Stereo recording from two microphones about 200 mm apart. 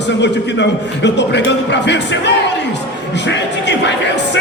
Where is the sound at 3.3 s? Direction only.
60° left (ahead or behind).